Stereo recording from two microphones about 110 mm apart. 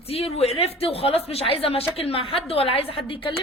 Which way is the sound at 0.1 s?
70° left (ahead or behind).